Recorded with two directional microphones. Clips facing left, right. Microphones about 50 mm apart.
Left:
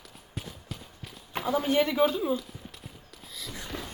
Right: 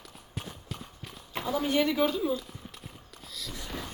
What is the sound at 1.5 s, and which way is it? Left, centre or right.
Speech, centre.